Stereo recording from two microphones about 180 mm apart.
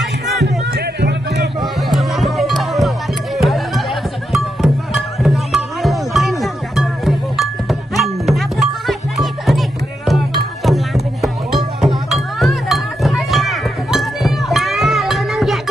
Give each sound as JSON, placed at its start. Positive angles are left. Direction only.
{"t": 1.0, "sound": "music", "side_deg": -70}
{"t": 1.9, "sound": "music", "side_deg": 0}